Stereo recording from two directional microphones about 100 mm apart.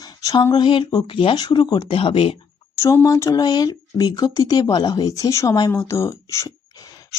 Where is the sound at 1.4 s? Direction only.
45° left (ahead or behind).